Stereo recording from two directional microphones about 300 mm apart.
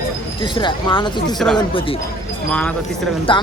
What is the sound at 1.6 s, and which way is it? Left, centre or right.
Speech, centre.